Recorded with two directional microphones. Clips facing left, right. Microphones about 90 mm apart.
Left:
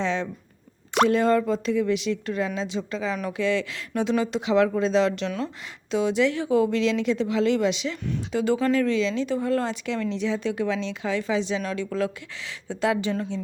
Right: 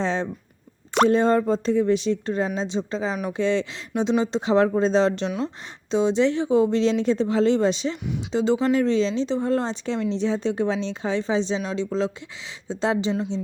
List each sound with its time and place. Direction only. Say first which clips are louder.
0.0 s a sound: right 1 dB; 35° right (ahead or behind)
1.0 s speech: right 2 dB; 30° right (ahead or behind)
8.3 s speech: right 2 dB; 25° right (ahead or behind)